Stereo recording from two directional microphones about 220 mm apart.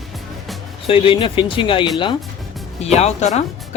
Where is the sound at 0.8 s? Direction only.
25° left (ahead or behind).